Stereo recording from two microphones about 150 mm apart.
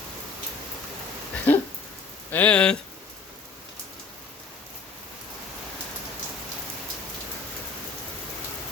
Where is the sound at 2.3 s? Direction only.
10° left (ahead or behind).